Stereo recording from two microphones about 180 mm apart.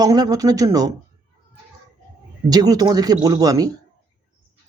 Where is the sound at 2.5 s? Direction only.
20° right (ahead or behind).